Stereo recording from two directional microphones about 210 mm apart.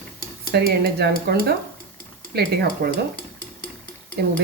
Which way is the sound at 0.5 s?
50° right (ahead or behind).